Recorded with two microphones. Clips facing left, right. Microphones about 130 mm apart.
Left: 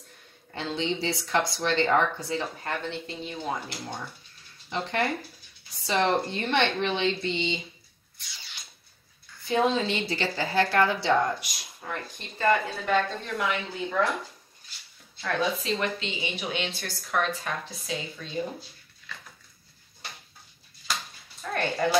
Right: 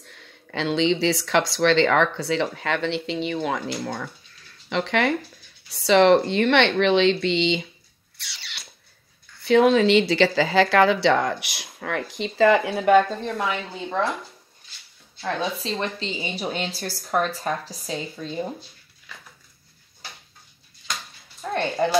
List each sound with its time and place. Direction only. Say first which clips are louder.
0.0 s speech: right 5 dB; 90° right
8.2 s a sound: right 5 dB; 75° right (ahead or behind)
9.4 s speech: right 8 dB; 70° right (ahead or behind)
13.2 s speech: right 3 dB; 35° right (ahead or behind)
15.2 s speech: right 1 dB; 30° right (ahead or behind)
21.4 s a sound: right 4 dB; 25° right (ahead or behind)